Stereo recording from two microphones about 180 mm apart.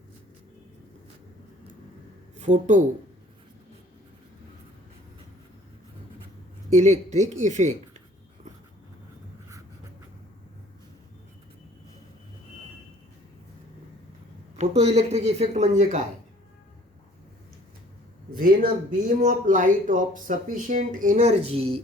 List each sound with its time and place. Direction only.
2.4 s speech: 40° right (ahead or behind)
6.7 s speech: 40° right (ahead or behind)
14.6 s speech: 35° right (ahead or behind)
18.3 s speech: 50° right (ahead or behind); by 21.8 s 35° right (ahead or behind)